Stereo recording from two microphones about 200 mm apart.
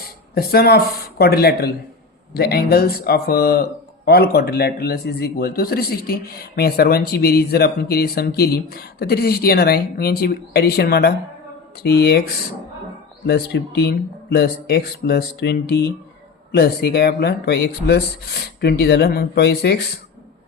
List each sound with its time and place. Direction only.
0.3 s a man's voice: 50° left (ahead or behind)